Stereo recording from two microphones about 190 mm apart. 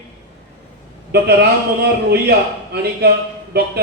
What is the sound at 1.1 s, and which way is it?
Speech, 55° right (ahead or behind).